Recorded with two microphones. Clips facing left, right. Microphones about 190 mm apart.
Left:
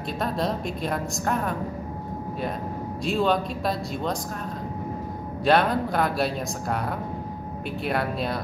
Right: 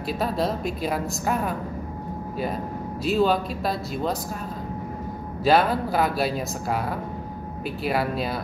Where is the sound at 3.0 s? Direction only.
5° right (ahead or behind).